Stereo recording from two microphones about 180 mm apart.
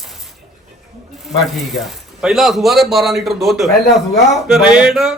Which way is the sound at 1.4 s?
Centre (ahead or behind).